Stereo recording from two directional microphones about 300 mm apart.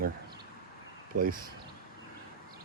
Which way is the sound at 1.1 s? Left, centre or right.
Right.